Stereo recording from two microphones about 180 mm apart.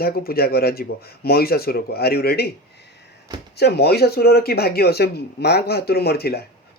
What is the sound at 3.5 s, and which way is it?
Speech, 65° left (ahead or behind).